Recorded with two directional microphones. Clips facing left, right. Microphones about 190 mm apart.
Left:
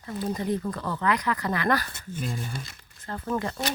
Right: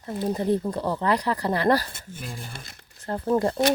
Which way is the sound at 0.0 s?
30° right (ahead or behind).